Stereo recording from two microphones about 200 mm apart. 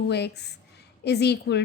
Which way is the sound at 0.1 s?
55° left (ahead or behind).